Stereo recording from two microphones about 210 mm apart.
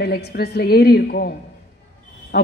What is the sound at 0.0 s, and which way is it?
A woman's voice, 50° left (ahead or behind).